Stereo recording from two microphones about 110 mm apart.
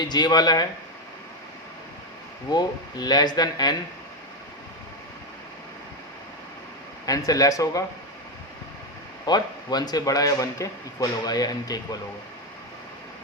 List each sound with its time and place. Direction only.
0.1 s a man's voice: 40° left (ahead or behind)
2.5 s a man's voice: 40° left (ahead or behind)
7.0 s a man's voice: 35° left (ahead or behind)
9.2 s a man's voice: 40° left (ahead or behind)